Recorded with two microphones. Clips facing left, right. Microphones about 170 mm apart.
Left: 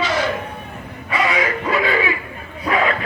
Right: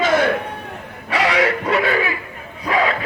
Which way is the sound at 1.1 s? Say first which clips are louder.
Right 2 dB; 80° right.